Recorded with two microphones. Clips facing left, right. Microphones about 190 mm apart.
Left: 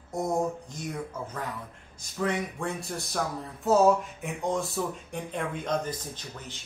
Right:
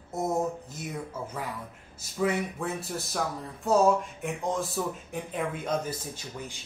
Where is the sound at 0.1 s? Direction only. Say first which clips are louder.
Even; 5° right (ahead or behind).